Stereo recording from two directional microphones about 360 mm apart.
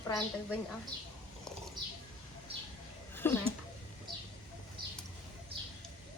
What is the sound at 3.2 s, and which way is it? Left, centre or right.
Speech, centre.